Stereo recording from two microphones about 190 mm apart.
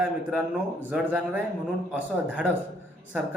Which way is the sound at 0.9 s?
5° right (ahead or behind).